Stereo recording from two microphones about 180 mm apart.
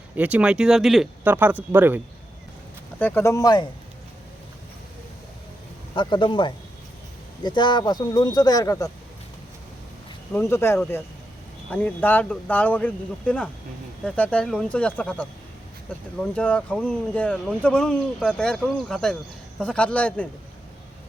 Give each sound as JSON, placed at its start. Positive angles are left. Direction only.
{"t": 0.2, "sound": "speech", "side_deg": -10}
{"t": 3.0, "sound": "speech", "side_deg": 15}
{"t": 5.9, "sound": "speech", "side_deg": 25}
{"t": 10.3, "sound": "speech", "side_deg": 15}